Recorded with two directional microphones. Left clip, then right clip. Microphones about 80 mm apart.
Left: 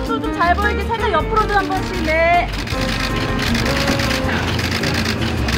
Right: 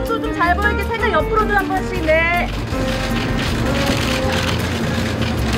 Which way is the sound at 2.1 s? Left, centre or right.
Left.